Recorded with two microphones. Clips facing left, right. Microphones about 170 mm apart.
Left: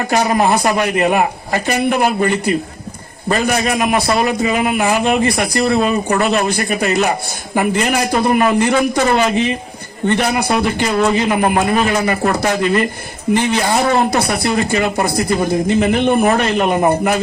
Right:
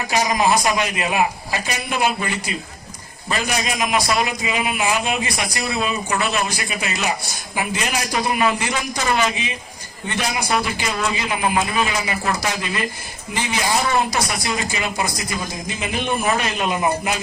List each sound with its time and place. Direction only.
0.1 s speech: 60° left (ahead or behind)